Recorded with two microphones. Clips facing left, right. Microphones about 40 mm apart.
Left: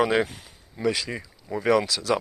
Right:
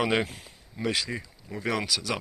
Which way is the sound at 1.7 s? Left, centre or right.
Centre.